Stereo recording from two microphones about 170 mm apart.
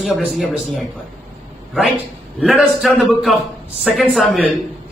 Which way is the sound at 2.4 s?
Centre (ahead or behind).